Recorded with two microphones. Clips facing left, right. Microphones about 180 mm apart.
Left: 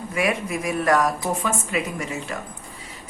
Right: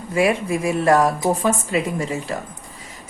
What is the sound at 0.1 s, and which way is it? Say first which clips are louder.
Speech: right 6 dB; 30° right (ahead or behind).